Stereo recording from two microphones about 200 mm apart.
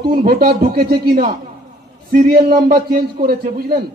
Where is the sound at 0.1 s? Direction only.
50° right (ahead or behind).